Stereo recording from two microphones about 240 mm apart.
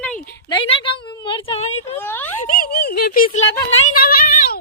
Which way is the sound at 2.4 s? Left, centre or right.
Left.